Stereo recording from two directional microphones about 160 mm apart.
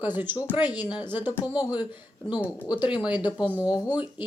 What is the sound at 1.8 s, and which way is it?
A woman's voice, 10° right (ahead or behind).